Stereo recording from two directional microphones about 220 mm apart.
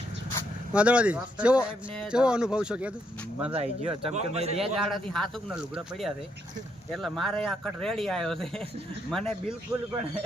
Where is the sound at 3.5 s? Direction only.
25° right (ahead or behind).